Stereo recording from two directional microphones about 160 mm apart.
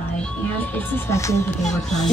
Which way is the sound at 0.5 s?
10° left (ahead or behind).